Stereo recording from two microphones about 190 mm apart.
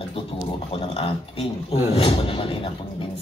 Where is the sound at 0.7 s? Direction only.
30° left (ahead or behind).